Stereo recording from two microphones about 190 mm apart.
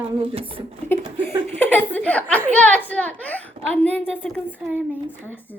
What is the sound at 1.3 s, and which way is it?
A woman's voice, 10° left (ahead or behind).